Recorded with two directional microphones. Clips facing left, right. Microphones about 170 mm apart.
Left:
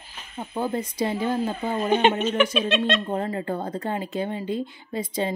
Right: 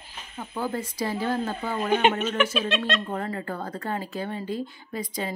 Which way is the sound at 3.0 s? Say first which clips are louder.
Left 4 dB; 25° left (ahead or behind).